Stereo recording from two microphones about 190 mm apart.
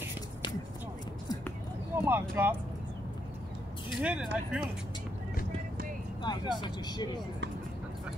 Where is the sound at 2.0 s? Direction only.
10° right (ahead or behind).